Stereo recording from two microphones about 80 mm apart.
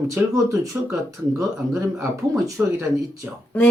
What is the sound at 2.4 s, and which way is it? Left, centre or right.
Speech, right.